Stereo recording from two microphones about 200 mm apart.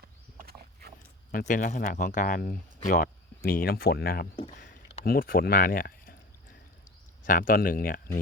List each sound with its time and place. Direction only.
0.3 s rowboat: 50° right (ahead or behind)
1.3 s speech: 45° left (ahead or behind)
4.4 s a sound: 30° left (ahead or behind)
5.0 s speech: 45° left (ahead or behind)
7.3 s speech: 45° left (ahead or behind)